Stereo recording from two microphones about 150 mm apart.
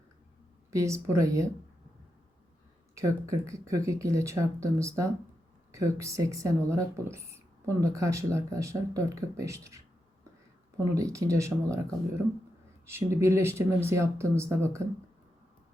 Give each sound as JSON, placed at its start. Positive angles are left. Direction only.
{"t": 0.7, "sound": "speech", "side_deg": -20}
{"t": 2.9, "sound": "speech", "side_deg": -20}
{"t": 10.9, "sound": "speech", "side_deg": -20}